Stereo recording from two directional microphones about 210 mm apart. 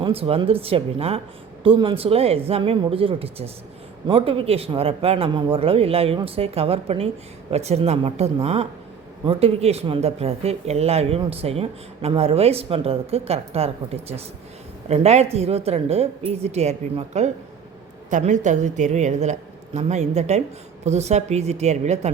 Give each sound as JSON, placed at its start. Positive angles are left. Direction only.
{"t": 0.0, "sound": "a woman's voice", "side_deg": -25}